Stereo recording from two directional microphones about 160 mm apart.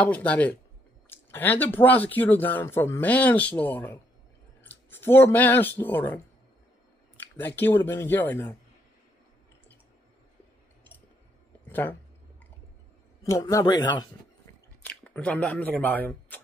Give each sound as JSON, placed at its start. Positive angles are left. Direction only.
{"t": 0.0, "sound": "speech", "side_deg": 10}
{"t": 11.7, "sound": "speech", "side_deg": 10}
{"t": 13.2, "sound": "a man's voice", "side_deg": 20}
{"t": 14.8, "sound": "speech", "side_deg": 10}